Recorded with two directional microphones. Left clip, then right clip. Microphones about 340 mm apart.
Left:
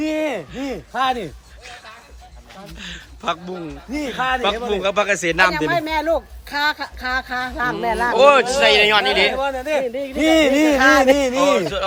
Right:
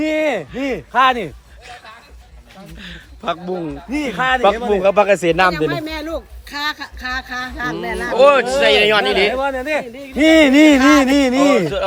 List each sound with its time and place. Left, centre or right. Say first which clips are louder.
0.0 s a sound: right 4 dB; right
0.7 s speech: right 7 dB; centre
2.8 s speech: right 1 dB; centre
3.9 s a man's voice: right 3 dB; centre
4.2 s a sound: right 4 dB; right
4.7 s a man's voice: right 5 dB; centre
5.6 s speech: left 3 dB; centre
8.1 s speech: right 2 dB; centre
9.4 s a sound: right 1 dB; right
11.3 s speech: right 2 dB; centre